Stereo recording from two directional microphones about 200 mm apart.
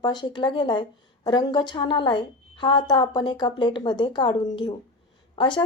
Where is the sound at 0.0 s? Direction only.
20° left (ahead or behind).